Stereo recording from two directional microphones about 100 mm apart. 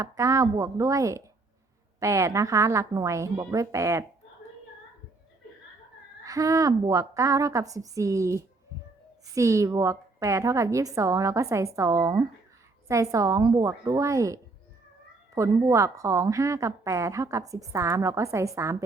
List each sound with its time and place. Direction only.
0.0 s a woman's voice: 35° right (ahead or behind)
6.2 s a woman's voice: 35° right (ahead or behind)
15.4 s a woman's voice: 30° right (ahead or behind)